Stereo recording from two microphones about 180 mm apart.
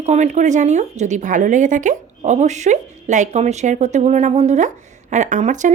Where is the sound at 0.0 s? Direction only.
40° right (ahead or behind).